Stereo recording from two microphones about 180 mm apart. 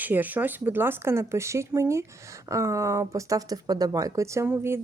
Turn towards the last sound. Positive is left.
turn(degrees=-15)  # may be behind; listen again after turning